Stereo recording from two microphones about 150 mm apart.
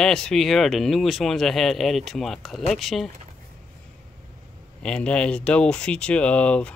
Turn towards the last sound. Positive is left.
turn(degrees=5)  # may be behind; listen again after turning